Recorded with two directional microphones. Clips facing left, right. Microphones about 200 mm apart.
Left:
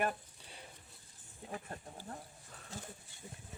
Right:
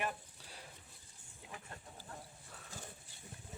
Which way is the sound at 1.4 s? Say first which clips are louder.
Left 7 dB; 40° left (ahead or behind).